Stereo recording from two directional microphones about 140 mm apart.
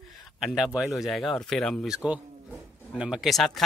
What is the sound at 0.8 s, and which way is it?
Speech, centre (ahead or behind).